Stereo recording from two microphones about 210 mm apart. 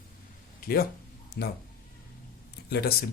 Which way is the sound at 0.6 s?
45° left (ahead or behind).